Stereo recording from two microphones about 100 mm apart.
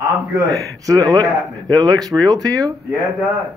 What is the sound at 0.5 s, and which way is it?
Speech, 35° right (ahead or behind).